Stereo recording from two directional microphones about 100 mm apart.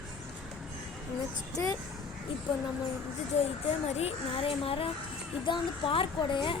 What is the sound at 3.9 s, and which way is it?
Speech, 80° left.